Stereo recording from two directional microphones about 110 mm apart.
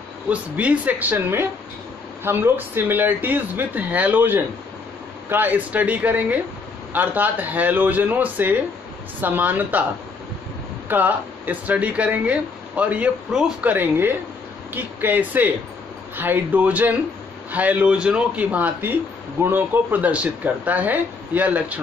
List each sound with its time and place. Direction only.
0.3 s speech: 10° right (ahead or behind)
10.9 s speech: 15° right (ahead or behind)
13.7 s speech: 20° right (ahead or behind)